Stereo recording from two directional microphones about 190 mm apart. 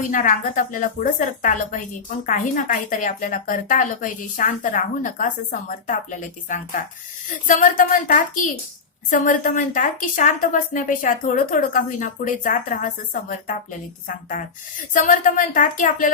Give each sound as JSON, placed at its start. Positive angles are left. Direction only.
{"t": 0.1, "sound": "a woman's voice", "side_deg": 45}